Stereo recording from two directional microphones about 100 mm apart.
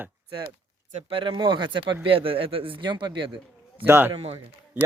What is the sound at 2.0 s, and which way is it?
A man's voice, 65° right (ahead or behind).